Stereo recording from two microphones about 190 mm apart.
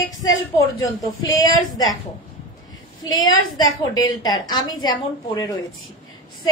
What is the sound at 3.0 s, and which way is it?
A woman's voice, 20° left (ahead or behind).